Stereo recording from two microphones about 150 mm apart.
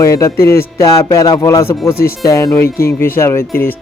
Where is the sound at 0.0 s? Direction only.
20° left (ahead or behind).